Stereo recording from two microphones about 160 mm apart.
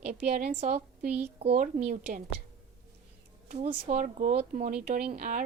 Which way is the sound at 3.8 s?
50° right (ahead or behind).